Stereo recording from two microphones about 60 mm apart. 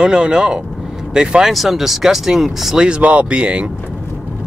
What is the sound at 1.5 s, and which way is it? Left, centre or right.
Speech, centre.